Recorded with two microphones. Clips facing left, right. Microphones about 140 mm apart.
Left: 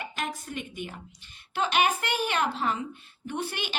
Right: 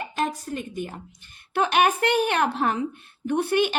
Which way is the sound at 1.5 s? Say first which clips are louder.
Right 5 dB; 55° right (ahead or behind).